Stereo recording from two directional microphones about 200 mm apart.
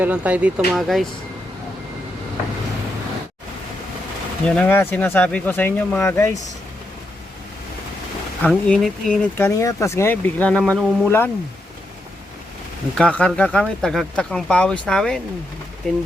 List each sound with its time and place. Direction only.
0.0 s speech: 5° right (ahead or behind)
4.4 s speech: 5° left (ahead or behind)
8.4 s speech: 5° left (ahead or behind)
9.6 s speech: 15° left (ahead or behind)
13.0 s speech: 5° left (ahead or behind)